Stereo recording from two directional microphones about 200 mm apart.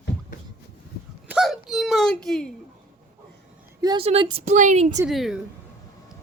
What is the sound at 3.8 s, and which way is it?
Speech, 25° right (ahead or behind).